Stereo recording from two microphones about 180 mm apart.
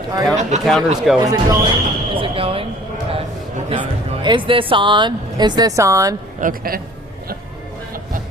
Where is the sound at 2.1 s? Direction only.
30° right (ahead or behind).